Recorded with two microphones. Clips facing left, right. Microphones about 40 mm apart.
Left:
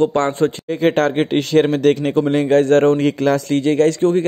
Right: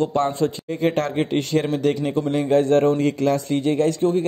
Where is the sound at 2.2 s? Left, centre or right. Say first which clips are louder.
Left 4 dB; left.